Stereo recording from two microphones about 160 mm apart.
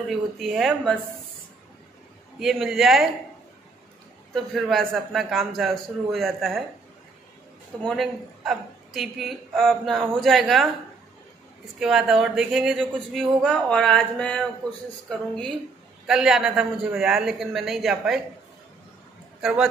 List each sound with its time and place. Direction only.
0.1 s a woman's voice: centre (ahead or behind)
2.3 s a woman's voice: centre (ahead or behind)
4.3 s a woman's voice: centre (ahead or behind)
7.8 s a woman's voice: centre (ahead or behind)
11.8 s a woman's voice: 5° right (ahead or behind)
19.4 s a woman's voice: 5° right (ahead or behind)